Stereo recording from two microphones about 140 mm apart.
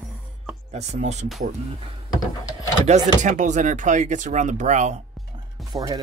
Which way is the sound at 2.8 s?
60° right (ahead or behind).